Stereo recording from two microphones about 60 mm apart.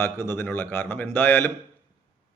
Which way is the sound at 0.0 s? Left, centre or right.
Left.